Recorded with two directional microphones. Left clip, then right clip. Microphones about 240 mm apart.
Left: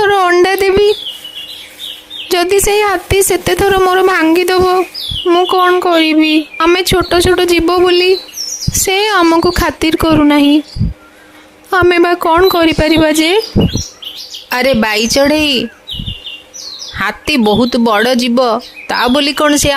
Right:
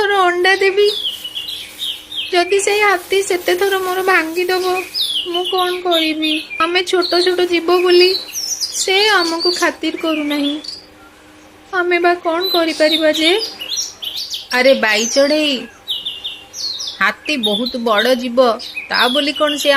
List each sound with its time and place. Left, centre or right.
0.0 s a sound: left
2.3 s speech: left
11.7 s speech: left
14.5 s speech: left
17.0 s speech: left